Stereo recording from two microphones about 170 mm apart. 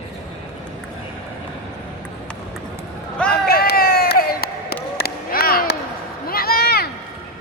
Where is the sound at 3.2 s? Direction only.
65° left (ahead or behind).